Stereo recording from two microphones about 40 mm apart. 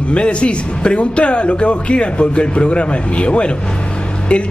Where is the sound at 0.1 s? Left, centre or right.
Left.